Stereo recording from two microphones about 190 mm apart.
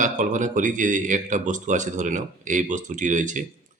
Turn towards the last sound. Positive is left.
turn(degrees=-40)  # may be behind; listen again after turning